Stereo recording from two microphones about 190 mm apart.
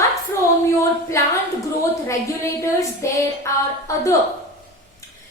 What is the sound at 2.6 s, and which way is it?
A woman's voice, 15° left (ahead or behind).